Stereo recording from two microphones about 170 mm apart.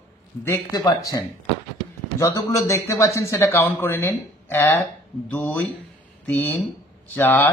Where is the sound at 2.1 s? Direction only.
20° left (ahead or behind).